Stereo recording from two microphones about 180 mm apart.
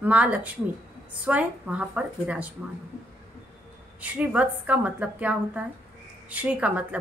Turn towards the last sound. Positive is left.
turn(degrees=-10)  # may be behind; listen again after turning